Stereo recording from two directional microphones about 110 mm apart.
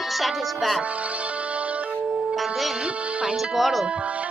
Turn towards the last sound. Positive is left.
turn(degrees=-10)  # may be behind; listen again after turning